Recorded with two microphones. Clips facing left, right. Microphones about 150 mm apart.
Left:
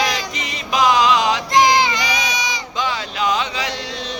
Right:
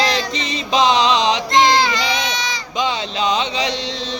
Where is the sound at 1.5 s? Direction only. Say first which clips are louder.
Left 1 dB; 15° left (ahead or behind).